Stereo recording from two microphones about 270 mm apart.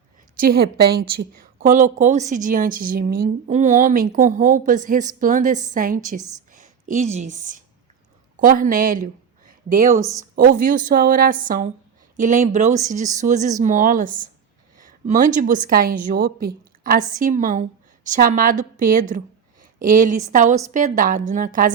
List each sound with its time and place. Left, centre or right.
0.3 s a woman's voice: right
6.5 s a sound: right
7.3 s a woman's voice: right
10.0 s speech: centre
10.3 s a woman's voice: right